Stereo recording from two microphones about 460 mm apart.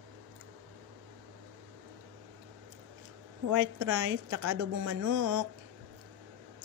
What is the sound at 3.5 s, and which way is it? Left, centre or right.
A woman's voice, right.